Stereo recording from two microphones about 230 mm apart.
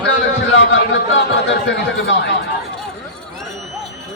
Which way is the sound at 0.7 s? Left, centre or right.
Left.